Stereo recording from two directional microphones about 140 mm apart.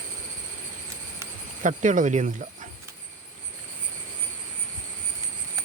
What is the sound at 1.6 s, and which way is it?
Speech, 65° right (ahead or behind).